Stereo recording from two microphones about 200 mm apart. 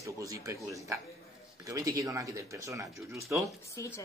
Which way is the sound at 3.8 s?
15° left (ahead or behind).